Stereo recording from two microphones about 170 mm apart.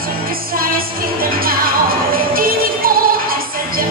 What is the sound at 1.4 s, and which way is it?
Music, 60° right (ahead or behind).